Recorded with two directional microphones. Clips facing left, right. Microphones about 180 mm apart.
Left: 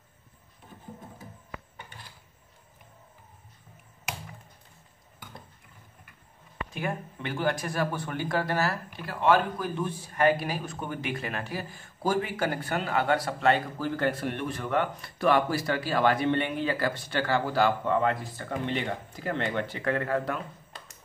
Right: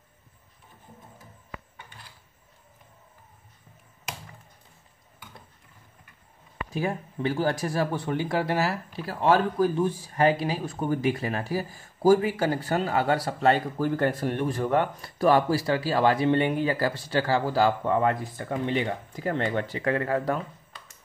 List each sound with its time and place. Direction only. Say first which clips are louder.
6.7 s speech: right 4 dB; 35° right (ahead or behind)
19.2 s speech: right 3 dB; 40° right (ahead or behind)